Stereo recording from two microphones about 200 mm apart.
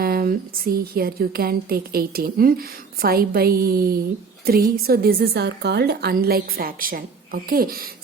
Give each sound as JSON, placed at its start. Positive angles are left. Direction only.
{"t": 0.0, "sound": "speech", "side_deg": -45}